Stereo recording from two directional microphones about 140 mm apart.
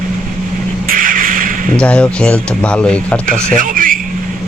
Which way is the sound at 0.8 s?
80° right.